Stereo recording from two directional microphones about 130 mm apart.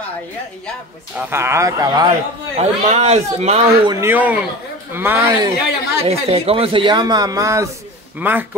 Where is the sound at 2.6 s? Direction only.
55° right (ahead or behind).